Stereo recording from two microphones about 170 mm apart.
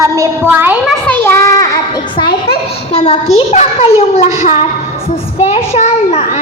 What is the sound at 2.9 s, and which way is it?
A child's voice, 40° left (ahead or behind).